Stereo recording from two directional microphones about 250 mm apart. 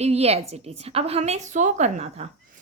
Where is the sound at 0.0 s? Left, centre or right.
Right.